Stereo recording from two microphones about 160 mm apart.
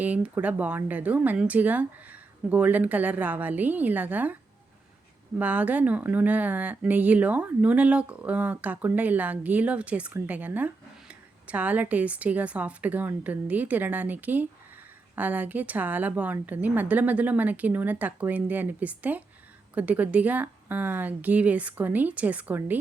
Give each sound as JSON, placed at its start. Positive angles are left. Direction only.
{"t": 0.0, "sound": "speech", "side_deg": -10}
{"t": 5.4, "sound": "speech", "side_deg": -10}